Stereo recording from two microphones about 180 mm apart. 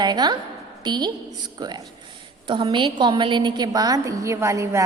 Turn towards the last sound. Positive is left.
turn(degrees=-15)  # may be behind; listen again after turning